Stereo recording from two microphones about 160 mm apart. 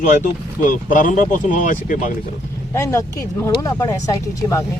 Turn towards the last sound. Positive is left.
turn(degrees=20)  # may be behind; listen again after turning